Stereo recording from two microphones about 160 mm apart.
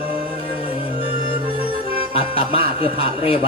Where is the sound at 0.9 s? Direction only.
35° left (ahead or behind).